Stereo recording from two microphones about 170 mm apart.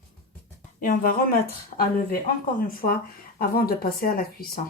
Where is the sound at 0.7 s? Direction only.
55° left (ahead or behind).